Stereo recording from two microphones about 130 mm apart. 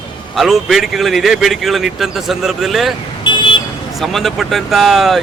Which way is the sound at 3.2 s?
40° left (ahead or behind).